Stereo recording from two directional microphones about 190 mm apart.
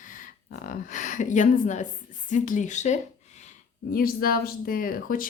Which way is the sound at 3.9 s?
50° left (ahead or behind).